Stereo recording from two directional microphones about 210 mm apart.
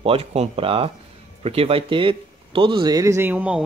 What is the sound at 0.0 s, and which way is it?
Speech, 30° right (ahead or behind).